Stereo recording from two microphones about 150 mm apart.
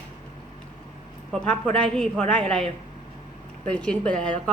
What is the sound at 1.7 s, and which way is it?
Speech, 5° left (ahead or behind).